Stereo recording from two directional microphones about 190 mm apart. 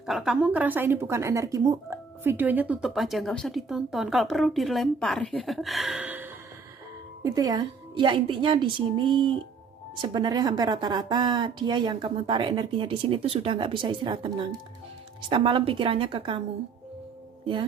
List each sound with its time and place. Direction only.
0.0 s a woman's voice: centre (ahead or behind)
7.2 s speech: 20° right (ahead or behind)